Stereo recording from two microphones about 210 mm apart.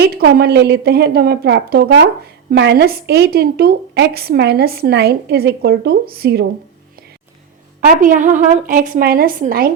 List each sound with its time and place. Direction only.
0.0 s a woman's voice: 50° right (ahead or behind)
7.8 s a woman's voice: 40° right (ahead or behind)